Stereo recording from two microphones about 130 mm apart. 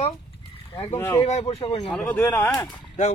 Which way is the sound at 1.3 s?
50° left (ahead or behind).